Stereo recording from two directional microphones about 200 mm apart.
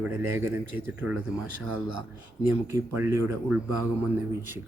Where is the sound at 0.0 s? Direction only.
10° right (ahead or behind).